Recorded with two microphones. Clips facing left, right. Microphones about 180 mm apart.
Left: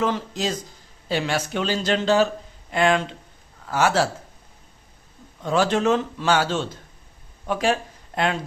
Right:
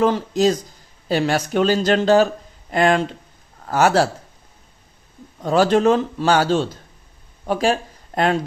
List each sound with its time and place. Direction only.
0.0 s speech: 40° right (ahead or behind)
5.4 s speech: 40° right (ahead or behind)